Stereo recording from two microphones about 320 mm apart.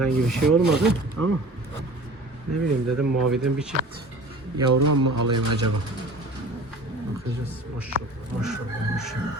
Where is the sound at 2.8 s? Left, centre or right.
Right.